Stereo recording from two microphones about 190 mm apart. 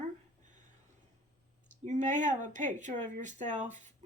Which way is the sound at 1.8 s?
40° right (ahead or behind).